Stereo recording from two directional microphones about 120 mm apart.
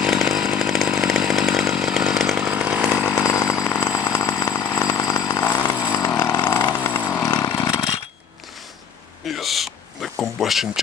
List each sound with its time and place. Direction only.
0.0 s chainsaw: 5° right (ahead or behind)
2.4 s chainsaw: 10° right (ahead or behind)
3.2 s jackhammer: 20° left (ahead or behind)
3.9 s a sound: 25° left (ahead or behind)
5.9 s chainsaw: 30° left (ahead or behind)
6.2 s vehicle: 20° left (ahead or behind)
6.7 s chainsaw: 20° left (ahead or behind)
7.4 s vehicle: 25° left (ahead or behind)
9.3 s a sound: centre (ahead or behind)